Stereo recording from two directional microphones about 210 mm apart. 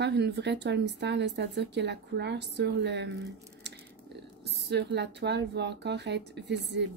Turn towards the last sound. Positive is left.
turn(degrees=-55)  # may be behind; listen again after turning